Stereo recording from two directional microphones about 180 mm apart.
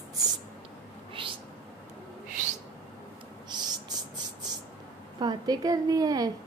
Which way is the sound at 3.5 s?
25° right (ahead or behind).